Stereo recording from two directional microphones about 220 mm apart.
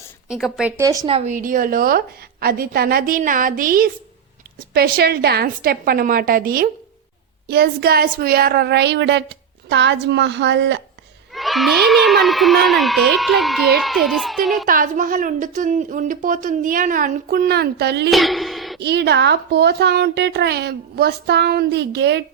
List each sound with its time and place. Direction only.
0.3 s a child's voice: centre (ahead or behind)
0.8 s speech: 15° right (ahead or behind)
1.1 s a woman's voice: 35° right (ahead or behind); by 10.8 s 55° right (ahead or behind)
11.3 s a child's voice: centre (ahead or behind)
14.7 s a woman's voice: 40° right (ahead or behind)
18.1 s a sound: centre (ahead or behind)
18.8 s speech: 50° right (ahead or behind)